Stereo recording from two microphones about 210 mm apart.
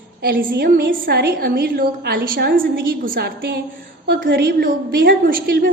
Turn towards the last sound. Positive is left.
turn(degrees=-45)  # may be behind; listen again after turning